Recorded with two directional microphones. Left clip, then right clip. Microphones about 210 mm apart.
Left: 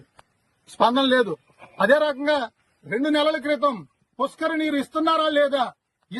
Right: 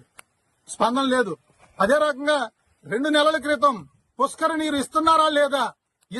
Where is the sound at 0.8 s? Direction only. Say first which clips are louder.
Left 2 dB; 15° left (ahead or behind).